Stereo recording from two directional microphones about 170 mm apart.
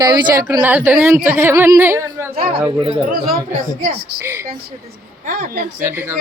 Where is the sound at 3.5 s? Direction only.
45° right (ahead or behind).